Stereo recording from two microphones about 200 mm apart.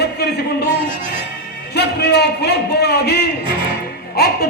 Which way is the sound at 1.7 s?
55° left (ahead or behind).